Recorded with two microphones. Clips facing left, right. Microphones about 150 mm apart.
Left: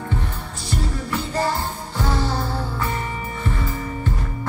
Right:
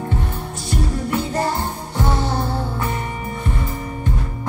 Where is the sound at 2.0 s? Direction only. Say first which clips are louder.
Right 2 dB; 25° right (ahead or behind).